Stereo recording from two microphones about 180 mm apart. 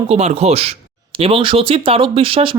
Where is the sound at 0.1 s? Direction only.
35° right (ahead or behind).